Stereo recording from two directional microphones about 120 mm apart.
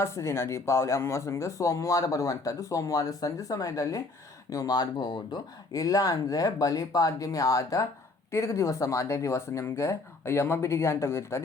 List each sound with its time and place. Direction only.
0.0 s speech: 20° left (ahead or behind)